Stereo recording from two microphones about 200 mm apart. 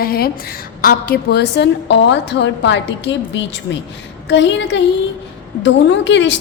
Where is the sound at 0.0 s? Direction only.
50° left (ahead or behind).